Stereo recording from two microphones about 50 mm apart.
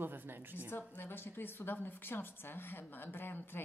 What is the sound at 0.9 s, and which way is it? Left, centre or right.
A woman's voice, left.